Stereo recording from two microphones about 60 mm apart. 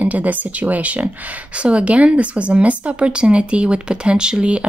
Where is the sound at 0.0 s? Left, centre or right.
Right.